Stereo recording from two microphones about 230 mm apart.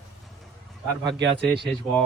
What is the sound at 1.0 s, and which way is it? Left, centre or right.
Speech, right.